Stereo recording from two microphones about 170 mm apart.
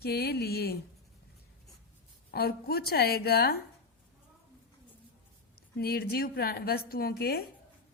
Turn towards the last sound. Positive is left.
turn(degrees=65)  # may be behind; listen again after turning